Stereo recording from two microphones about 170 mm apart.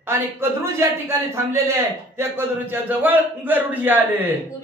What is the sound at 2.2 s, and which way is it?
A man's voice, 10° right (ahead or behind).